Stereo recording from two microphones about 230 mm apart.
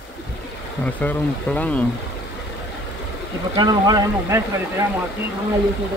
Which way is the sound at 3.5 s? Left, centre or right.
Centre.